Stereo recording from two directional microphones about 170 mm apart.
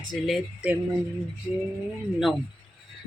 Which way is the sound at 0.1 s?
Centre (ahead or behind).